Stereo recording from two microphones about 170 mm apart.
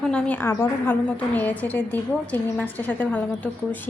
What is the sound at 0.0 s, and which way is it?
A woman's voice, 10° left (ahead or behind).